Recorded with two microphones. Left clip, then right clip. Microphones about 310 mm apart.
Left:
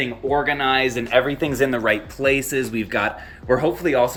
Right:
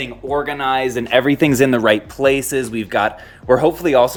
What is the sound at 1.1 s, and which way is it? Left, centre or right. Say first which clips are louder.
Speech: right 7 dB; right.